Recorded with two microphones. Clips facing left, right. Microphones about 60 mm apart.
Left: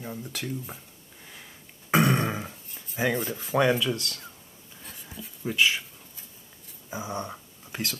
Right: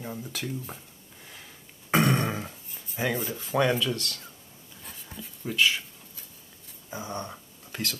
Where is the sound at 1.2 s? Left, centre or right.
Centre.